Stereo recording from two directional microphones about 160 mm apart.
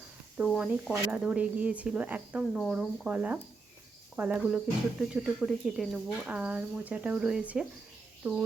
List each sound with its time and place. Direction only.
0.3 s speech: 5° right (ahead or behind)